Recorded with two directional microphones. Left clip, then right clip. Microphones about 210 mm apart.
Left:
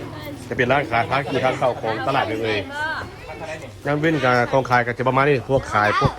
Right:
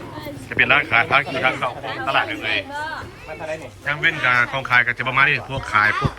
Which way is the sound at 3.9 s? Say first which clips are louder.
Even; 20° left (ahead or behind).